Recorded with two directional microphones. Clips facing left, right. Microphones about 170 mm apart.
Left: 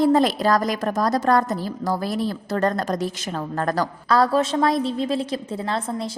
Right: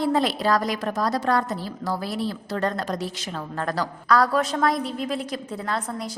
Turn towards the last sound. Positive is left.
turn(degrees=25)  # may be behind; listen again after turning